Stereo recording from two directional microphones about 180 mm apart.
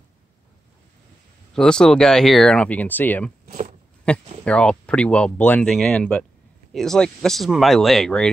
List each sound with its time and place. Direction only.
1.5 s speech: 5° left (ahead or behind)
3.4 s a sound: 45° right (ahead or behind)
4.1 s speech: 5° left (ahead or behind)